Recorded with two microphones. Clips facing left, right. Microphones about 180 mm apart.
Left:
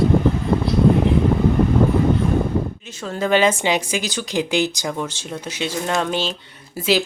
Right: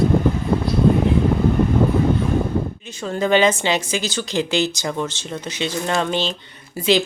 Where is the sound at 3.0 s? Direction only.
5° left (ahead or behind).